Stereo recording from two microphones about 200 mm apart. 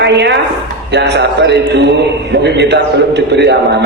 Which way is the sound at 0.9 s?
60° right (ahead or behind).